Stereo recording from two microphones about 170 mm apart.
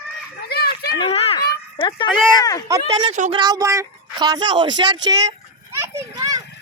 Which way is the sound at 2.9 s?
40° right (ahead or behind).